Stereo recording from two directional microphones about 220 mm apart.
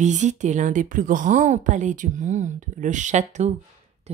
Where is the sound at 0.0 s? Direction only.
35° right (ahead or behind).